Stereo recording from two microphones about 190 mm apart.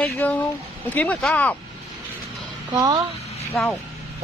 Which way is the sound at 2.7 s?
20° right (ahead or behind).